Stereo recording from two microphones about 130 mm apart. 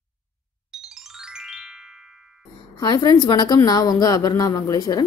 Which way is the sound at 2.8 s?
35° left (ahead or behind).